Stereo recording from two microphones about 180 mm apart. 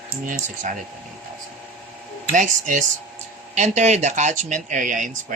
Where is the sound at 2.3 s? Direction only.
45° right (ahead or behind).